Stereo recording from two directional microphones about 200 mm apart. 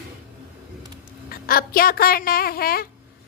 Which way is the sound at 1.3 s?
45° left (ahead or behind).